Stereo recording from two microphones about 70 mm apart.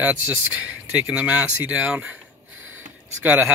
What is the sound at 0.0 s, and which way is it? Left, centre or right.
Speech, right.